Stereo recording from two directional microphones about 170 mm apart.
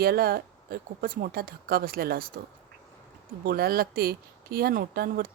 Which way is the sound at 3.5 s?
60° right (ahead or behind).